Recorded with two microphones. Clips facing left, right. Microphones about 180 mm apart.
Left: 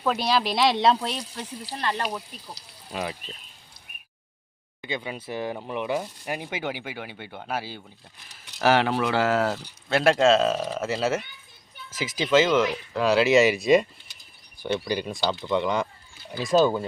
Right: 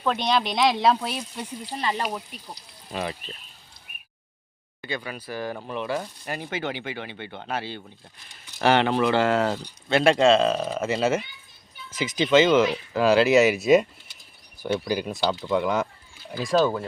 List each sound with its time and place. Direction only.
0.0 s speech: 5° left (ahead or behind); by 2.4 s 10° right (ahead or behind)
2.5 s speech: 5° left (ahead or behind)
4.8 s speech: 20° left (ahead or behind); by 15.9 s 5° right (ahead or behind)